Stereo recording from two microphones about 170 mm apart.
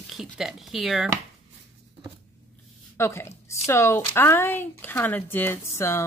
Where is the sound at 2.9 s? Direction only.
15° left (ahead or behind).